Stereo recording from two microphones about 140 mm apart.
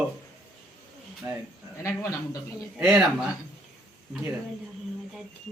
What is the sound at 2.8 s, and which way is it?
Speech, 5° right (ahead or behind).